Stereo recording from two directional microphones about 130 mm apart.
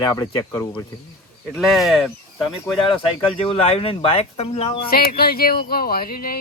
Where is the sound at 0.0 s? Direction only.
25° left (ahead or behind).